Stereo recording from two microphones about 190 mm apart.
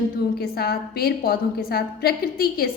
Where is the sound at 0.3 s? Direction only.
55° left (ahead or behind).